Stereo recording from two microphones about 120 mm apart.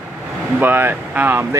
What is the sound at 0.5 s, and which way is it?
Speech, 15° right (ahead or behind).